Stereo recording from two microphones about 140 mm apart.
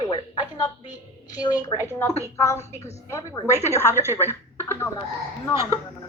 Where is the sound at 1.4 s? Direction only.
25° left (ahead or behind).